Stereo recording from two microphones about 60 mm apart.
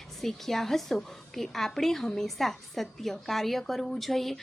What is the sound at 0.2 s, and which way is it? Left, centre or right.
A woman's voice, centre.